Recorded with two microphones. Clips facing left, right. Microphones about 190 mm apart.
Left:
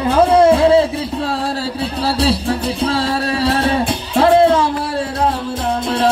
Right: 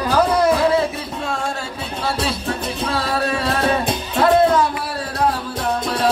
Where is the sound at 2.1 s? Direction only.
30° left (ahead or behind).